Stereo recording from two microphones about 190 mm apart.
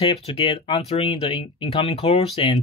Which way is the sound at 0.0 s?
30° left (ahead or behind).